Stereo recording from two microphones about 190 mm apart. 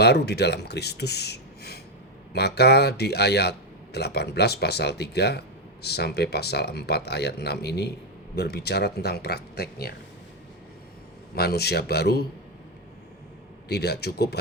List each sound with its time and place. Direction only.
0.0 s speech: 60° left (ahead or behind)
11.3 s speech: 55° left (ahead or behind)
13.7 s speech: 60° left (ahead or behind)